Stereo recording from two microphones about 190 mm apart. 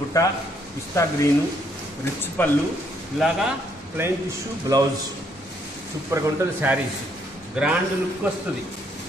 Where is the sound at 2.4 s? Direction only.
10° left (ahead or behind).